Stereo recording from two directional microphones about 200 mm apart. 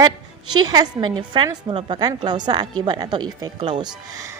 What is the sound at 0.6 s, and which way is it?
A woman's voice, 20° right (ahead or behind).